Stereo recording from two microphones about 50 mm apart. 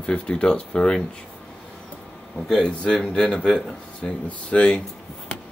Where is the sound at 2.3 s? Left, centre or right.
Centre.